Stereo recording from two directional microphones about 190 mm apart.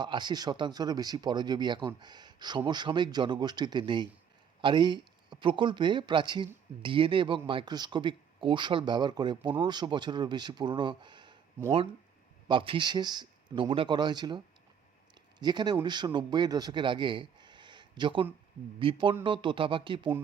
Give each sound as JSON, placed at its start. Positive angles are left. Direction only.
{"t": 0.0, "sound": "a man's voice", "side_deg": -25}